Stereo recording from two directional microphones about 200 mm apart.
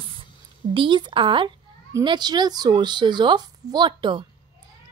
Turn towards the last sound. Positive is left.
turn(degrees=-25)  # may be behind; listen again after turning